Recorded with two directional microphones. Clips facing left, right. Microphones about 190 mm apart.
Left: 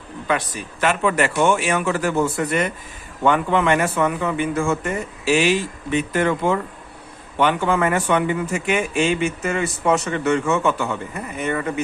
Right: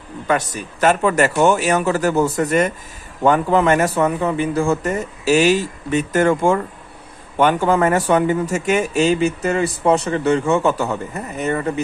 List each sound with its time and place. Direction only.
0.3 s speech: 40° right (ahead or behind)